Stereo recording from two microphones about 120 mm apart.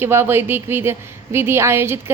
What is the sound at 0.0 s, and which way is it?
A woman's voice, 20° right (ahead or behind).